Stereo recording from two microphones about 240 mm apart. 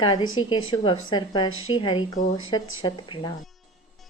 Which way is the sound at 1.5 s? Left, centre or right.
Left.